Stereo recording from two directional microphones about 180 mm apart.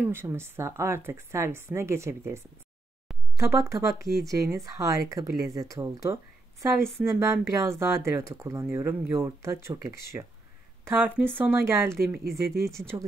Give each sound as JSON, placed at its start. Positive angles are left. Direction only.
{"t": 0.0, "sound": "speech", "side_deg": -10}